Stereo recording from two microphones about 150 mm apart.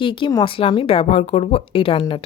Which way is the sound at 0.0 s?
35° left (ahead or behind).